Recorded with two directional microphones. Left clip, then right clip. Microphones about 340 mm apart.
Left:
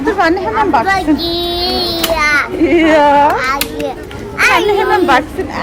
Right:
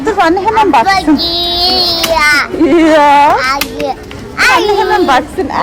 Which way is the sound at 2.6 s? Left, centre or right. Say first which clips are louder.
Right 3 dB; centre.